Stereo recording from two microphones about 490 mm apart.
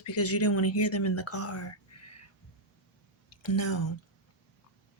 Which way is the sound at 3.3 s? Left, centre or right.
Left.